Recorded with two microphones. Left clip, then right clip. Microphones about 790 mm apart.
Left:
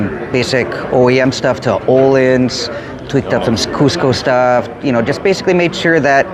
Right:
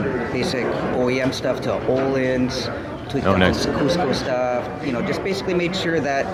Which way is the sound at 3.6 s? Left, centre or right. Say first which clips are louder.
Left 6 dB; left.